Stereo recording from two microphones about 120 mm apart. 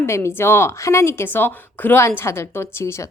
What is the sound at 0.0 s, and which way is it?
A woman's voice, 20° left (ahead or behind).